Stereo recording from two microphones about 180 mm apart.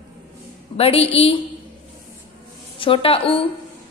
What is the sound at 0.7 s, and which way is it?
Speech, 30° left (ahead or behind).